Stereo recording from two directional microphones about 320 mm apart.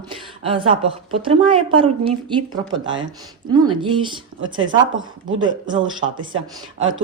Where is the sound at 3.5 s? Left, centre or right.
Centre.